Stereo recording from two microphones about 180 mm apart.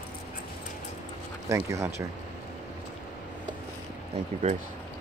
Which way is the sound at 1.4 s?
15° right (ahead or behind).